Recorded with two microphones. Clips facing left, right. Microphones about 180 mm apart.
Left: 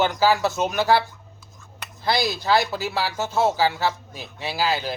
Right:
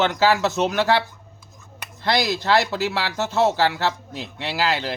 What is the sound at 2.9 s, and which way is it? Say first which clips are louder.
A man's voice: right 1 dB; 85° right.